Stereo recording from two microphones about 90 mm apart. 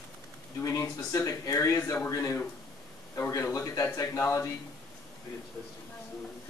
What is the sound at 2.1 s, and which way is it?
Speech, 35° left (ahead or behind).